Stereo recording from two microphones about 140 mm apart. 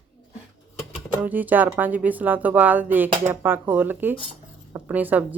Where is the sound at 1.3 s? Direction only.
10° right (ahead or behind).